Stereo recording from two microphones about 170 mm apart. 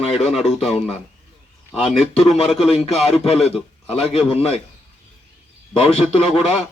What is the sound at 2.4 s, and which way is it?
A man's voice, 35° left (ahead or behind).